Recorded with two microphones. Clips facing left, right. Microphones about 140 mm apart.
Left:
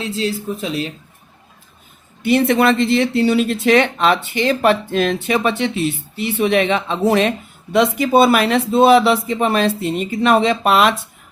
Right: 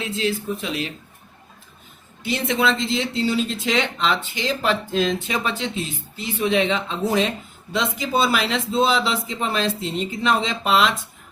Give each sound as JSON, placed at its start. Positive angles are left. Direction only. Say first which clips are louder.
{"t": 0.0, "sound": "speech", "louder": "left 3 dB", "side_deg": 35}
{"t": 2.2, "sound": "speech", "louder": "left 8 dB", "side_deg": 60}